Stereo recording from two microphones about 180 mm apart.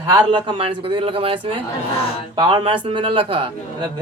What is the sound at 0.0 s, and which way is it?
A man's voice, 25° right (ahead or behind).